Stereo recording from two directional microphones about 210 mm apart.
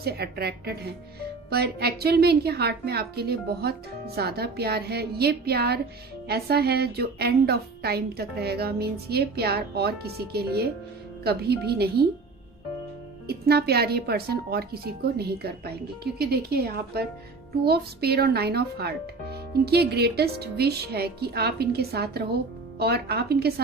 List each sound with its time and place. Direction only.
0.0 s speech: 50° right (ahead or behind)
13.2 s speech: 50° right (ahead or behind)